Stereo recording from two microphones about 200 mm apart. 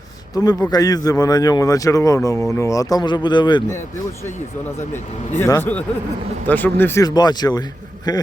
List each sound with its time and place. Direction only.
0.4 s a man's voice: 20° left (ahead or behind)
5.4 s a man's voice: 10° left (ahead or behind)